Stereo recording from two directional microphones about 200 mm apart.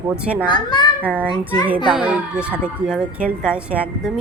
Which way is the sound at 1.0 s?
10° right (ahead or behind).